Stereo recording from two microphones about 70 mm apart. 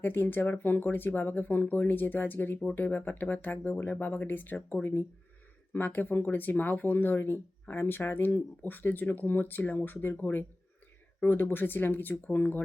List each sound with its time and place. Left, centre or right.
0.0 s speech: left